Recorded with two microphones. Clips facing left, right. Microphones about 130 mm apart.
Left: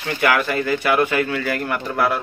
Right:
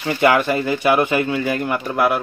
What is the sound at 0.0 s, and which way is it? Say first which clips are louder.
Speech: right 3 dB; 20° right (ahead or behind).